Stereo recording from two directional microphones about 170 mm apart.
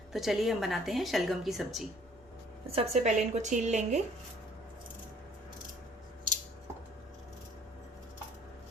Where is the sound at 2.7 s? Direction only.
40° right (ahead or behind).